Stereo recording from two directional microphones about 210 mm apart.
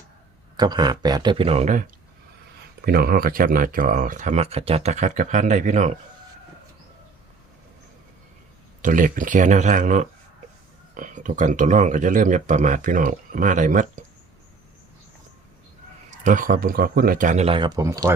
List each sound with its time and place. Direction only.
0.5 s speech: 20° right (ahead or behind); by 5.9 s 35° right (ahead or behind)
8.8 s speech: 40° right (ahead or behind)
16.0 s speech: 35° right (ahead or behind); by 18.1 s 15° right (ahead or behind)